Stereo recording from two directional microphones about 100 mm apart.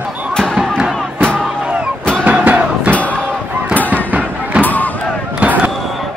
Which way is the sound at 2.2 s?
15° right (ahead or behind).